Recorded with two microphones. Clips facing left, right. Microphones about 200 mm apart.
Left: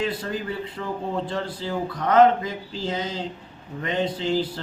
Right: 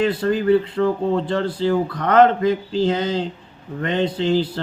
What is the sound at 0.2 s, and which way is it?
A man's voice, 60° right (ahead or behind).